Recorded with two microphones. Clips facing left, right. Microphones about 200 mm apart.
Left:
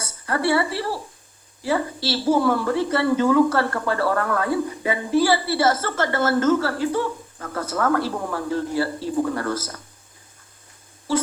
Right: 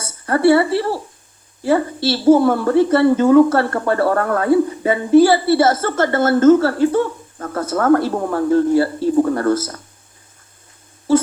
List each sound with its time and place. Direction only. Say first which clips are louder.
0.3 s a woman's voice: right 8 dB; 50° right (ahead or behind)
2.0 s a woman's voice: right 7 dB; 50° right (ahead or behind)
4.4 s speech: right 9 dB; 30° right (ahead or behind)
4.9 s a woman's voice: right 8 dB; 50° right (ahead or behind)